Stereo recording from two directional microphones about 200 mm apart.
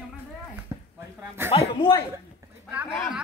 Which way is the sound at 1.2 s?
10° right (ahead or behind).